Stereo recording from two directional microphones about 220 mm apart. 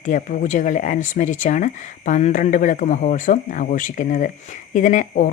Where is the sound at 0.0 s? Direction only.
35° left (ahead or behind).